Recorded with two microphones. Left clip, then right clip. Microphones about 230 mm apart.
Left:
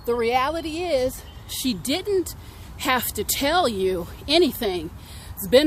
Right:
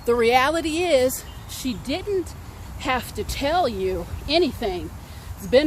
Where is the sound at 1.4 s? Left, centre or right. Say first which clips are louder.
Left 3 dB; left.